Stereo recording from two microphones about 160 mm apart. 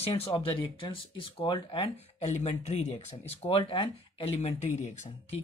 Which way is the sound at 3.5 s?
35° left (ahead or behind).